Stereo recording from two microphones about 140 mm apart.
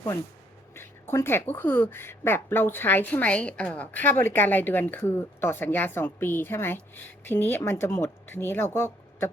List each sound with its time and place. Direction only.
0.8 s speech: 15° left (ahead or behind)